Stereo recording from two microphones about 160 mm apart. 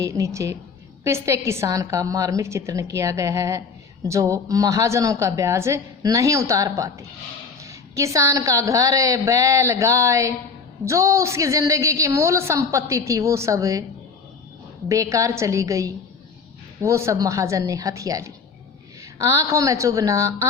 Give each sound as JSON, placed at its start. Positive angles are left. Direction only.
{"t": 0.0, "sound": "a woman's voice", "side_deg": -20}
{"t": 14.8, "sound": "a woman's voice", "side_deg": -20}